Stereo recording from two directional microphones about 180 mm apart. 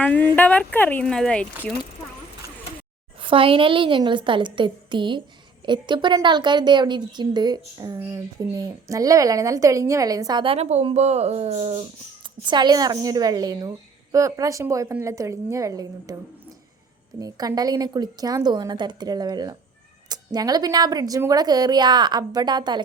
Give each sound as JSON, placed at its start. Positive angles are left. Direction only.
{"t": 0.0, "sound": "speech", "side_deg": 10}
{"t": 3.2, "sound": "a woman's voice", "side_deg": -30}
{"t": 17.2, "sound": "a woman's voice", "side_deg": -20}